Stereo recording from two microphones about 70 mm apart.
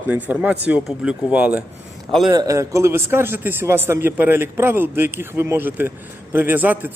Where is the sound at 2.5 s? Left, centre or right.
Right.